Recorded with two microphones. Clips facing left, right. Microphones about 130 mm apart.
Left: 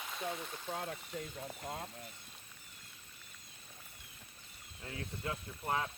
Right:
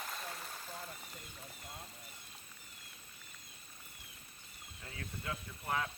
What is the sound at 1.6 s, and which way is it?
Speech, 70° left (ahead or behind).